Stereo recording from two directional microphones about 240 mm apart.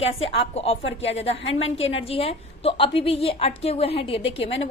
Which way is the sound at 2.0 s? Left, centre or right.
Left.